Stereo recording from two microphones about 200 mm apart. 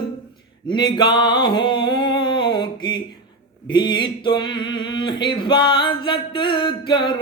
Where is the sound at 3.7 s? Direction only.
20° left (ahead or behind).